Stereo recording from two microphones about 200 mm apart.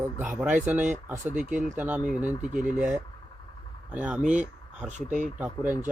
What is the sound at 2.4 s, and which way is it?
Speech, 40° right (ahead or behind).